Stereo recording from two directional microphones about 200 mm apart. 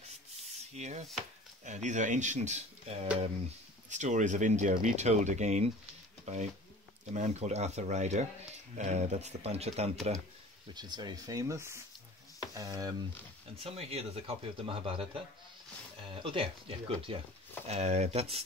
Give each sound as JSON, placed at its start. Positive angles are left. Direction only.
{"t": 0.7, "sound": "speech", "side_deg": -35}
{"t": 10.7, "sound": "speech", "side_deg": -20}
{"t": 13.6, "sound": "speech", "side_deg": -30}